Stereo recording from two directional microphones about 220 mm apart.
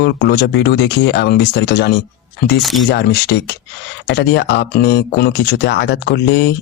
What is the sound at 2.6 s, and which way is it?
Speech, centre (ahead or behind).